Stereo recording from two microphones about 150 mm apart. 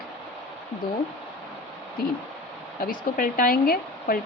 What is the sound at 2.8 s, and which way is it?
Speech, 70° left (ahead or behind).